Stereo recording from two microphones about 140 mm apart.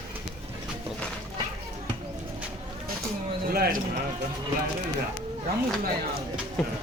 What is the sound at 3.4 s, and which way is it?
Speech, 90° right.